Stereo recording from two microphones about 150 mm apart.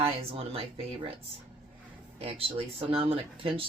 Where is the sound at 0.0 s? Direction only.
40° right (ahead or behind).